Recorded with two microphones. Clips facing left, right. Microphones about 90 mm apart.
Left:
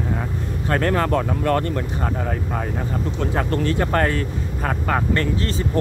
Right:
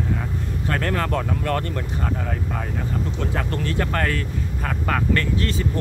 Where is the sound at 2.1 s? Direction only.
35° left (ahead or behind).